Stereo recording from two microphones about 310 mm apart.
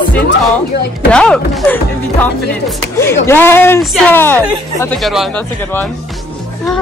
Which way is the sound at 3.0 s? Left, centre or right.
Centre.